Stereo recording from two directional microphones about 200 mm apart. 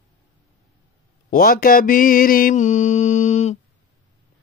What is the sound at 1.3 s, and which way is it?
Mantra, 45° left (ahead or behind).